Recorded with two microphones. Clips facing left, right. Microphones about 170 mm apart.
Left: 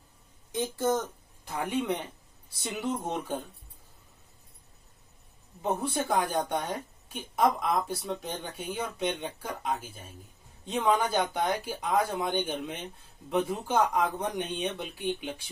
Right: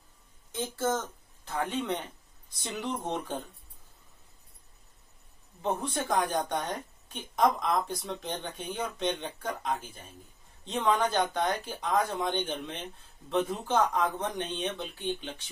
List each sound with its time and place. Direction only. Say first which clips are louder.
0.5 s a woman's voice: left 2 dB; 15° left (ahead or behind)
5.6 s a woman's voice: left 2 dB; 10° left (ahead or behind)